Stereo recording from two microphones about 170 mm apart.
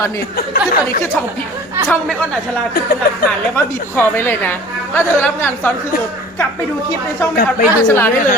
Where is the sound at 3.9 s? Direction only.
15° left (ahead or behind).